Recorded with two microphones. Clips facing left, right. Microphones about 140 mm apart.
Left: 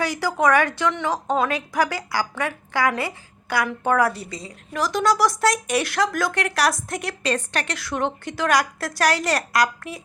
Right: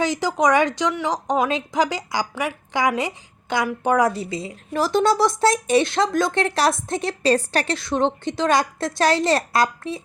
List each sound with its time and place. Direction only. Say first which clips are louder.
0.0 s a woman's voice: right 1 dB; 20° right (ahead or behind)
4.7 s speech: right 3 dB; 30° right (ahead or behind)